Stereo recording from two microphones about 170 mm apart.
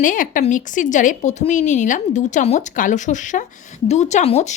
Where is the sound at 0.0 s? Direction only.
50° left (ahead or behind).